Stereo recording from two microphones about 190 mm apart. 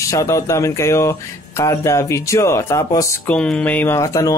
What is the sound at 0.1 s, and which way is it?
Speech, 15° left (ahead or behind).